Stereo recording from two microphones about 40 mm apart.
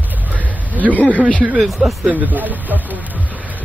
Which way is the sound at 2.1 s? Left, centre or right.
Right.